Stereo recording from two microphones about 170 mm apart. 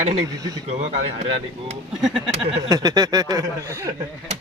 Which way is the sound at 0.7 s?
35° right (ahead or behind).